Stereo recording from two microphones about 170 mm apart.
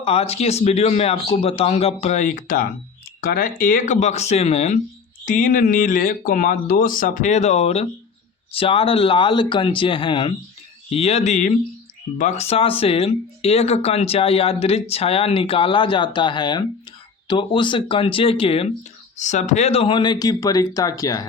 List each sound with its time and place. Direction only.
0.0 s speech: 35° left (ahead or behind)
5.2 s speech: 50° left (ahead or behind); by 18.7 s 35° left (ahead or behind)
19.1 s speech: 45° left (ahead or behind); by 21.2 s 20° left (ahead or behind)